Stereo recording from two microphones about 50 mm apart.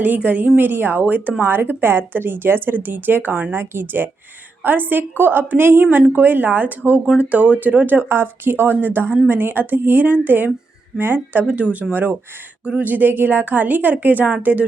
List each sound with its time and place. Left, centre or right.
0.0 s a woman's voice: right
1.0 s a woman's voice: right
8.1 s a woman's voice: right
11.4 s a woman's voice: right